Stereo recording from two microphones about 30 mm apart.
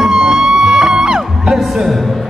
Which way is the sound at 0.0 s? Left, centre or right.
Right.